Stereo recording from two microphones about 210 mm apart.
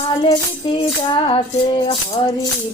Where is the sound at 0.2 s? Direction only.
25° left (ahead or behind).